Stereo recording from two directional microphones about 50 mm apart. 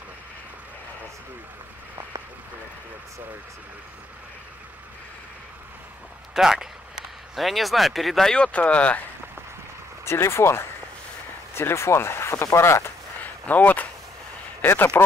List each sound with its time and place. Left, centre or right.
6.3 s a sound: centre
7.3 s speech: centre
8.4 s speech: left
10.0 s speech: left
13.2 s a sound: left
15.0 s speech: left